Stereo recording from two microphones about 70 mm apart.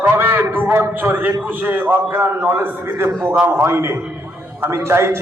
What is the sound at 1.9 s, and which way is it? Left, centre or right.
Speech, right.